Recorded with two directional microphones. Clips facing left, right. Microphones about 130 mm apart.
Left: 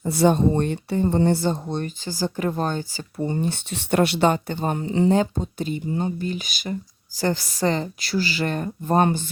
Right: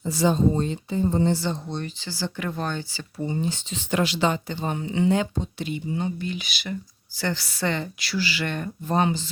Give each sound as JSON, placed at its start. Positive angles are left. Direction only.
{"t": 0.0, "sound": "a woman's voice", "side_deg": 60}